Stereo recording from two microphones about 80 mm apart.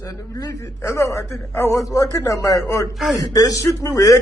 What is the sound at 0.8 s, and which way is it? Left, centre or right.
A man's voice, left.